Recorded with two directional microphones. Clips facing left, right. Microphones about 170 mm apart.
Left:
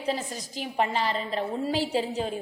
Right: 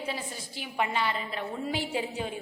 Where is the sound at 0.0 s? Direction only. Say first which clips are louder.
Left 5 dB; 40° left (ahead or behind).